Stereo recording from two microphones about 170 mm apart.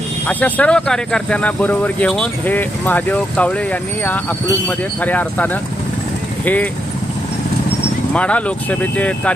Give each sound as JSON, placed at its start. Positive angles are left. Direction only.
{"t": 0.3, "sound": "speech", "side_deg": 10}
{"t": 8.1, "sound": "speech", "side_deg": 5}